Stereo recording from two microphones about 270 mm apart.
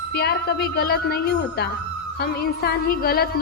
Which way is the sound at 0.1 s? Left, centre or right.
Left.